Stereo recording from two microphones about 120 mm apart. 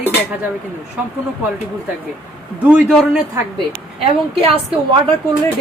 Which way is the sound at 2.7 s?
5° right (ahead or behind).